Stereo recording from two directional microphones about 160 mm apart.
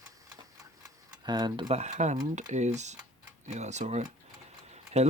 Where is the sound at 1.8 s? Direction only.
45° right (ahead or behind).